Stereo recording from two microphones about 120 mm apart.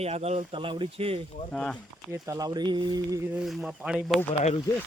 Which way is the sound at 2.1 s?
25° right (ahead or behind).